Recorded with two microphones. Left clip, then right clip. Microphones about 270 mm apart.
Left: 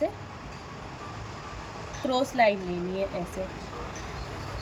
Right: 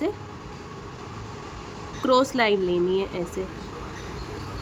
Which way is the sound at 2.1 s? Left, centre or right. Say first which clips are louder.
Right 3 dB; centre.